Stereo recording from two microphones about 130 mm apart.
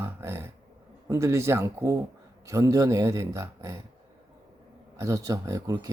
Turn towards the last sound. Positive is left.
turn(degrees=-25)  # may be behind; listen again after turning